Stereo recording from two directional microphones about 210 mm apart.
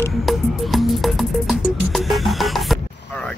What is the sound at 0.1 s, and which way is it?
Music, centre (ahead or behind).